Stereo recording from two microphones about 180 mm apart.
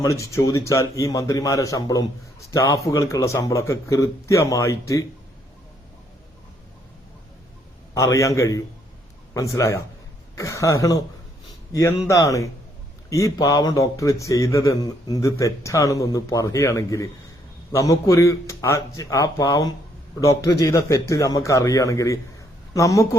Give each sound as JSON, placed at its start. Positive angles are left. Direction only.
{"t": 0.0, "sound": "a man's voice", "side_deg": 15}
{"t": 7.9, "sound": "a man's voice", "side_deg": 15}